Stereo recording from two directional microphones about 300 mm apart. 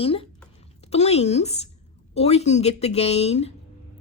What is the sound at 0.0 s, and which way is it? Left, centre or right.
A woman's voice, centre.